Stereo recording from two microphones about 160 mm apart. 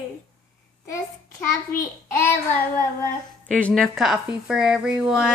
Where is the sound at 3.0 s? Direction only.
10° left (ahead or behind).